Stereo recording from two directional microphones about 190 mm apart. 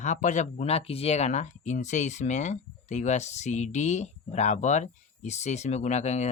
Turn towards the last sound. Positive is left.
turn(degrees=35)  # may be behind; listen again after turning